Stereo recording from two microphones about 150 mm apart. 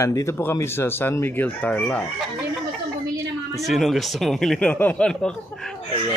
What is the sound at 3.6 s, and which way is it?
Speech, centre (ahead or behind).